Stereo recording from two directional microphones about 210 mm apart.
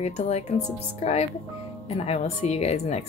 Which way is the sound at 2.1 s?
30° left (ahead or behind).